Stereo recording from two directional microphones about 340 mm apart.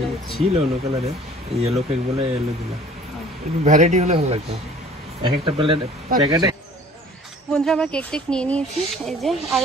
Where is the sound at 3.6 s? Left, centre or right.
Right.